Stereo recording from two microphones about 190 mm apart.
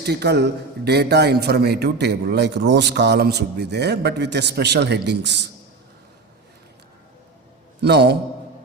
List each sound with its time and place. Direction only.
0.0 s a man's voice: 60° right (ahead or behind)
7.8 s a man's voice: 60° right (ahead or behind)